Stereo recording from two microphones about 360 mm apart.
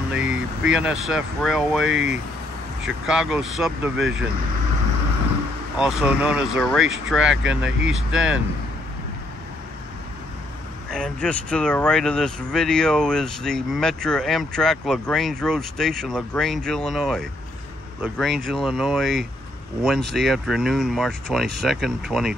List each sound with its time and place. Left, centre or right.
0.1 s speech: centre
3.1 s speech: centre
5.8 s speech: centre
7.4 s speech: right
8.1 s speech: centre
10.9 s speech: centre